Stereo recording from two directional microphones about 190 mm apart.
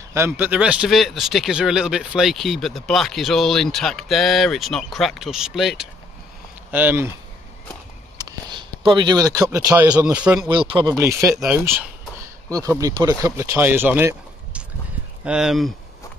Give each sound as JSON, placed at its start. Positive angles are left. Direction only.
{"t": 0.1, "sound": "speech", "side_deg": -10}
{"t": 8.2, "sound": "speech", "side_deg": -20}
{"t": 9.9, "sound": "speech", "side_deg": -5}
{"t": 10.5, "sound": "speech", "side_deg": -25}
{"t": 11.0, "sound": "speech", "side_deg": -15}
{"t": 11.3, "sound": "speech", "side_deg": 0}